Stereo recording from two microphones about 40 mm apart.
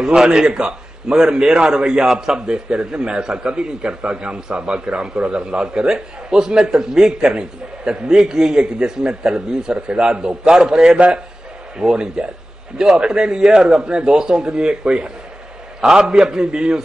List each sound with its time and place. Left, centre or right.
0.0 s a man's voice: centre
13.4 s speech: centre
15.8 s speech: centre